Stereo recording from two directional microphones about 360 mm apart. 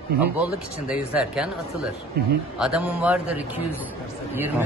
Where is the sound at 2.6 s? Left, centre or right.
Centre.